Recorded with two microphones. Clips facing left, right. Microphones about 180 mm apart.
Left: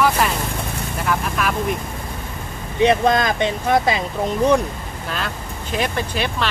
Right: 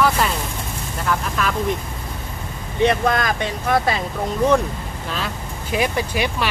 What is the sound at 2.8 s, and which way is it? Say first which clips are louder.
Speech: left 2 dB; 25° left (ahead or behind).